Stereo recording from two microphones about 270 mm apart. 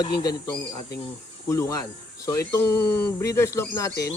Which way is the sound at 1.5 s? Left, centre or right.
Centre.